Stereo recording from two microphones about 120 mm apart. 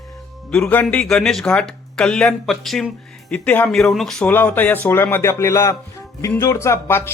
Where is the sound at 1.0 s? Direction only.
5° left (ahead or behind).